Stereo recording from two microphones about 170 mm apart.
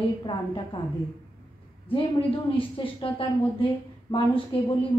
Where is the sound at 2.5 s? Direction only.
30° left (ahead or behind).